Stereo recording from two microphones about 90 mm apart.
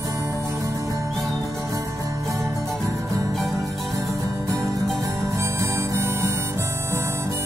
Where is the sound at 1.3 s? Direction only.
40° right (ahead or behind).